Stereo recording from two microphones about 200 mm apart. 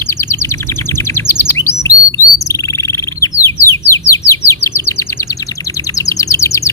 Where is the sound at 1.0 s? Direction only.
10° left (ahead or behind).